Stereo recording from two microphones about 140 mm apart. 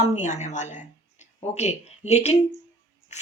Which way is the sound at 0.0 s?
50° left (ahead or behind).